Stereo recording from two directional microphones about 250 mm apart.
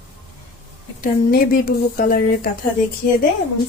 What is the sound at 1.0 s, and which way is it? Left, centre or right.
Speech, left.